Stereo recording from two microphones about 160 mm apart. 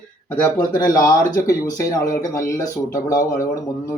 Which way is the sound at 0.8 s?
20° left (ahead or behind).